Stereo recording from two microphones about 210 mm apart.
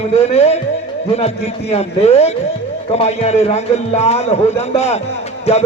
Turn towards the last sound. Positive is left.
turn(degrees=30)  # may be behind; listen again after turning